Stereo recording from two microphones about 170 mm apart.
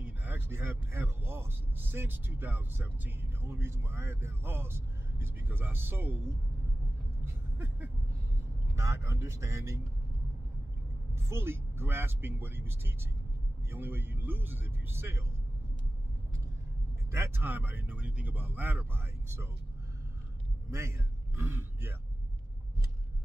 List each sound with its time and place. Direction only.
0.0 s speech: 10° right (ahead or behind)
7.5 s a sound: 15° right (ahead or behind)
8.7 s speech: 15° right (ahead or behind)
11.1 s speech: 15° right (ahead or behind)
17.1 s speech: 15° right (ahead or behind)
21.4 s speech: 10° right (ahead or behind)